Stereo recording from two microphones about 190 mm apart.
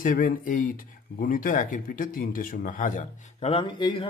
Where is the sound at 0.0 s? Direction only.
45° left (ahead or behind).